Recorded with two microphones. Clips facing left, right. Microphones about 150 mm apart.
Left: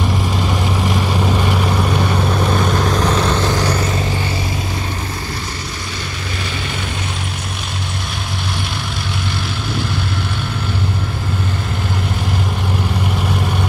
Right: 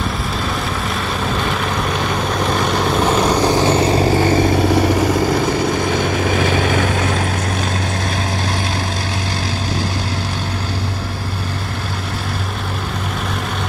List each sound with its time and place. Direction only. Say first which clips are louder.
0.8 s vehicle: left 3 dB; 15° left (ahead or behind); by 4.4 s 40° right (ahead or behind)
4.6 s vehicle: right 11 dB; 80° right
6.4 s vehicle: right 9 dB; 55° right (ahead or behind)